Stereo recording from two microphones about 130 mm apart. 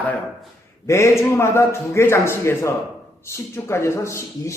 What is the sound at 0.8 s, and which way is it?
A man's voice, 20° left (ahead or behind).